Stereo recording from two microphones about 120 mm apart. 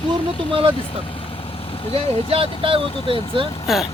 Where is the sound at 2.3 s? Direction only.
50° right (ahead or behind).